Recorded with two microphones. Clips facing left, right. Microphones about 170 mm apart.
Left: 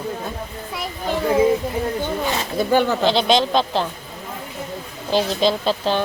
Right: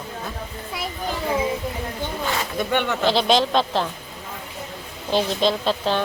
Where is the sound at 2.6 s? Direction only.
35° left (ahead or behind).